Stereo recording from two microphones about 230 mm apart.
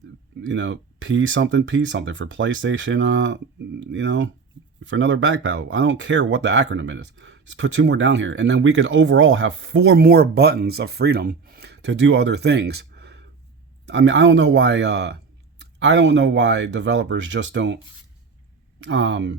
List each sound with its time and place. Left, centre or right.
0.4 s speech: right
18.8 s speech: right